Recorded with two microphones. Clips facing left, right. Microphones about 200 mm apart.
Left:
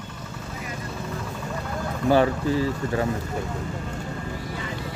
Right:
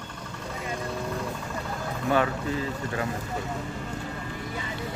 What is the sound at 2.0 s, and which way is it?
Speech, 30° left (ahead or behind).